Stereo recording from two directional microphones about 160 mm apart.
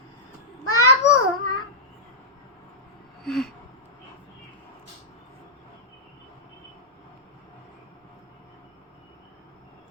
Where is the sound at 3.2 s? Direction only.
Centre (ahead or behind).